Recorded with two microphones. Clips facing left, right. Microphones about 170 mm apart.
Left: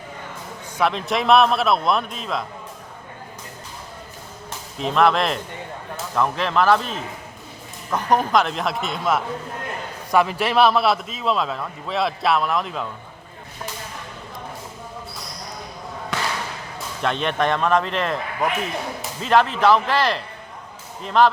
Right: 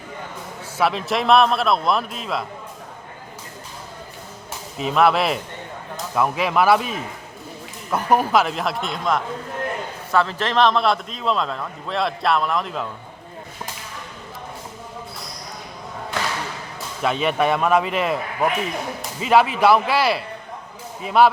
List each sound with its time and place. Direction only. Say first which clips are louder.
0.8 s a man's voice: right 1 dB; 5° right (ahead or behind)
4.8 s a man's voice: right 1 dB; 5° right (ahead or behind)
10.1 s a man's voice: left 2 dB; 15° left (ahead or behind)
16.1 s basketball bounce: even; 75° left (ahead or behind)
17.0 s speech: right 2 dB; 5° right (ahead or behind)